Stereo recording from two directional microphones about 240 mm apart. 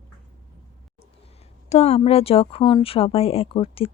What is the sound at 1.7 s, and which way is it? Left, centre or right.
Speech, left.